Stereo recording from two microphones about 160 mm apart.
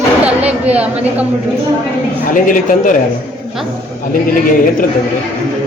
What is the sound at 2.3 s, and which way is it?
Speech, 55° left (ahead or behind).